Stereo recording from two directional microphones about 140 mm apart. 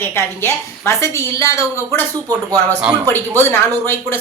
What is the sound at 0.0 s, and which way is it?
A woman's voice, 20° left (ahead or behind).